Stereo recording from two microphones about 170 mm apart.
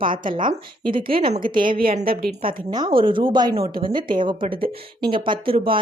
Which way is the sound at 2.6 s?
25° right (ahead or behind).